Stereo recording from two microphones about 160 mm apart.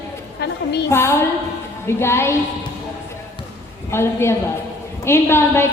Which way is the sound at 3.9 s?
15° left (ahead or behind).